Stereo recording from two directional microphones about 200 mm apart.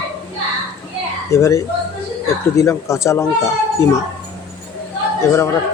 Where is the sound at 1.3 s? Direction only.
15° left (ahead or behind).